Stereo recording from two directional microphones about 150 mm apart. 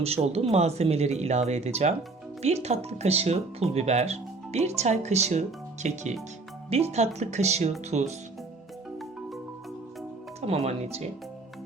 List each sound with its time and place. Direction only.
0.3 s speech: 45° right (ahead or behind)
10.4 s speech: 45° right (ahead or behind)